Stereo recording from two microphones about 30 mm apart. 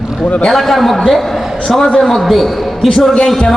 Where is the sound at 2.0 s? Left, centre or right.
Centre.